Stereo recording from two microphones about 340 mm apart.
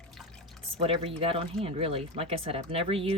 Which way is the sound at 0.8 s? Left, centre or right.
Centre.